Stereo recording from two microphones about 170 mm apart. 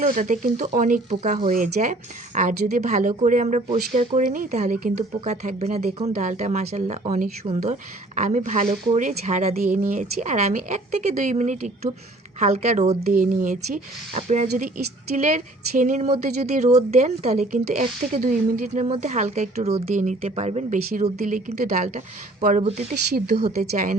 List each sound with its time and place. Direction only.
0.0 s speech: 50° right (ahead or behind)
15.8 s speech: 45° right (ahead or behind)